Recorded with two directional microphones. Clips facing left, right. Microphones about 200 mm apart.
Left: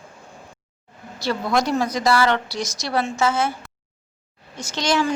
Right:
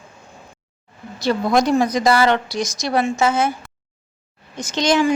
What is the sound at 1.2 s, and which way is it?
A woman's voice, 15° right (ahead or behind).